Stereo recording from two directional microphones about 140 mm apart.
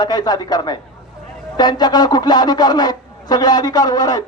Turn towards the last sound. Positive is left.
turn(degrees=25)  # may be behind; listen again after turning